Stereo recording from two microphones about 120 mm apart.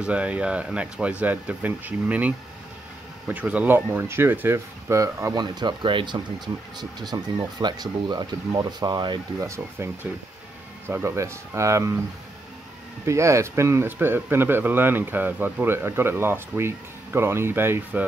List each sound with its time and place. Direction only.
0.0 s speech: 10° right (ahead or behind); by 9.2 s 35° right (ahead or behind)
9.4 s speech: 25° right (ahead or behind)
10.9 s speech: 20° right (ahead or behind)
13.0 s speech: 25° right (ahead or behind)